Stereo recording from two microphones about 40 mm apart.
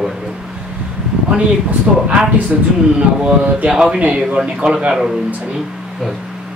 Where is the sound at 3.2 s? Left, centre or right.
Right.